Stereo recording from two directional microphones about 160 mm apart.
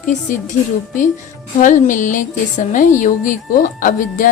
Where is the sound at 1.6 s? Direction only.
50° left (ahead or behind).